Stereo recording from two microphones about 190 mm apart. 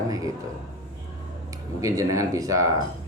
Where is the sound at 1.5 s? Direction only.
15° right (ahead or behind).